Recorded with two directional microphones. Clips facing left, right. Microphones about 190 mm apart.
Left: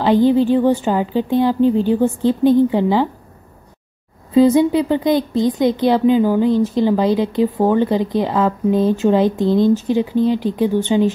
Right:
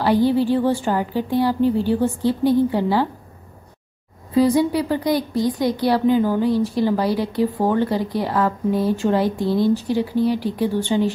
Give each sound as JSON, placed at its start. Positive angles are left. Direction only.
{"t": 0.0, "sound": "speech", "side_deg": 20}
{"t": 4.3, "sound": "speech", "side_deg": 20}